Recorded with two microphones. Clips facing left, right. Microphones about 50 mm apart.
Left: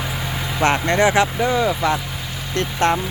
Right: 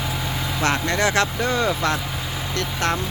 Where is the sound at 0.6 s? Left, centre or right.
Left.